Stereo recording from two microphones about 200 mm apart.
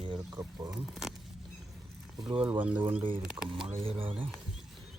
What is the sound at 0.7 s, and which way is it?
Speech, centre (ahead or behind).